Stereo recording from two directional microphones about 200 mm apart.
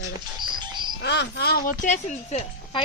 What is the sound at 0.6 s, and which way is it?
Music, 20° right (ahead or behind).